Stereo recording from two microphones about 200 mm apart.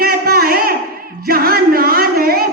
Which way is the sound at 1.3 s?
50° right (ahead or behind).